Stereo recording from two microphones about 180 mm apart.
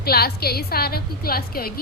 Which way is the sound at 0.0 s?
60° left (ahead or behind).